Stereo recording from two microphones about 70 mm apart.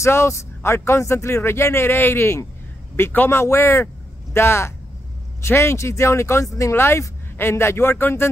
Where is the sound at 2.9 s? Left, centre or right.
Left.